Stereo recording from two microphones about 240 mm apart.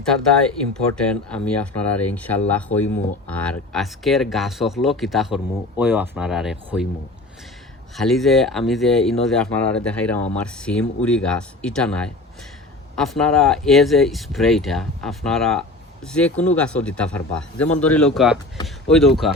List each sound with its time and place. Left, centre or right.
0.9 s speech: centre
7.9 s speech: centre